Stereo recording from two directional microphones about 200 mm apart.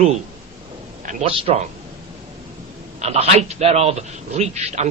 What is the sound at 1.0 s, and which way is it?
Speech, 30° right (ahead or behind).